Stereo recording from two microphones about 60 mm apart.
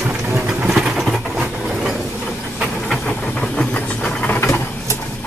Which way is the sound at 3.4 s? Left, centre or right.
Centre.